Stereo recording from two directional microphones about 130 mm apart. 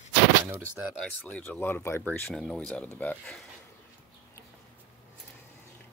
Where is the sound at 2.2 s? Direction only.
5° left (ahead or behind).